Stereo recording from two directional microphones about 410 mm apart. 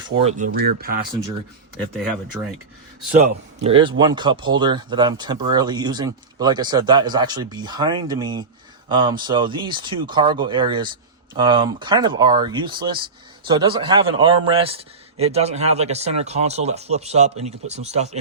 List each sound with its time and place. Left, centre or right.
0.2 s speech: centre
2.4 s speech: centre
3.6 s speech: centre